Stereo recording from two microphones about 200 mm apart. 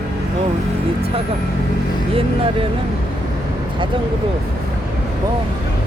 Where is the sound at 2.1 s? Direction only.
25° right (ahead or behind).